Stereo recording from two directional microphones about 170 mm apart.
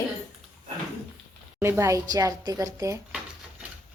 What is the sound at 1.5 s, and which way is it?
A woman's voice, 15° right (ahead or behind).